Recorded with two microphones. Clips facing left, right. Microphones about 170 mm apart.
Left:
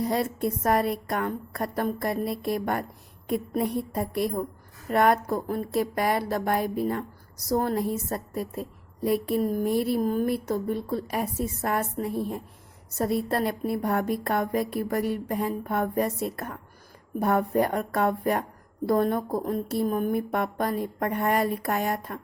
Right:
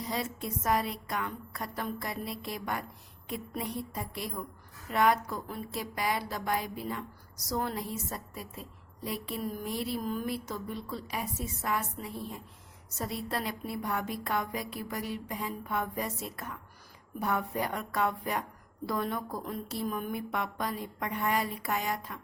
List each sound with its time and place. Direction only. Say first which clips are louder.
0.0 s a woman's voice: left 9 dB; 55° left (ahead or behind)